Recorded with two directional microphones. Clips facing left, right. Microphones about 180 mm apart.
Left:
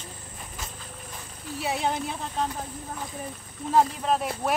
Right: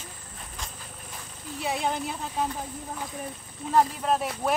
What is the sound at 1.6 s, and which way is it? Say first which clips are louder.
Speech: left 1 dB; centre (ahead or behind).